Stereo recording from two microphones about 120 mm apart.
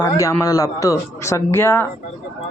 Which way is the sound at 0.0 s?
25° left (ahead or behind).